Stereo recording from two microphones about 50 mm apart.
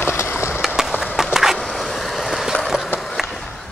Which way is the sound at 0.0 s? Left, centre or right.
Left.